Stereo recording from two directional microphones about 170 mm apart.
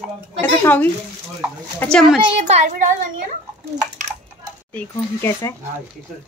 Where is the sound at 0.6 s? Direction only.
10° left (ahead or behind).